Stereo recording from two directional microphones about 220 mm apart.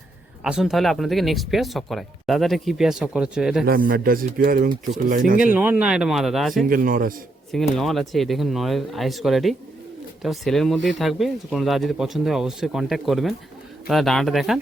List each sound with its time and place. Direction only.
0.4 s speech: centre (ahead or behind)
3.7 s a man's voice: 40° right (ahead or behind)
5.5 s speech: 5° right (ahead or behind)
6.7 s a man's voice: 40° right (ahead or behind)
7.5 s speech: centre (ahead or behind)